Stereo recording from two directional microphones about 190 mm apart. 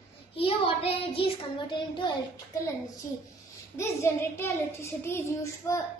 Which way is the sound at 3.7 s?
15° left (ahead or behind).